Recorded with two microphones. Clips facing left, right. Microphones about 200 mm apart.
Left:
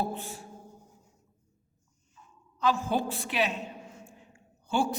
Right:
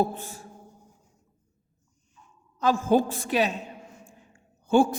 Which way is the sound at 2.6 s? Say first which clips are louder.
Right 6 dB; 45° right (ahead or behind).